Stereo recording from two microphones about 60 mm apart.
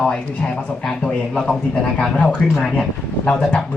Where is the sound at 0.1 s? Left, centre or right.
Centre.